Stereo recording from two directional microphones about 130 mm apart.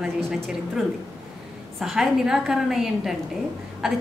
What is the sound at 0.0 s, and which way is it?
A woman's voice, 5° right (ahead or behind).